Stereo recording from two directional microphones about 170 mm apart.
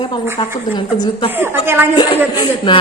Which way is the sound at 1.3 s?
15° right (ahead or behind).